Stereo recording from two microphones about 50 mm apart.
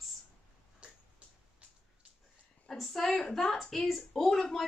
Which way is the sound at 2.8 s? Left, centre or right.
Centre.